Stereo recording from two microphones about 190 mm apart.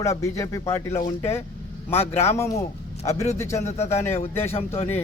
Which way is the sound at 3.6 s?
35° left (ahead or behind).